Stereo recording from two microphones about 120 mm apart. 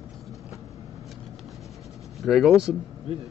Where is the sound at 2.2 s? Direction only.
Centre (ahead or behind).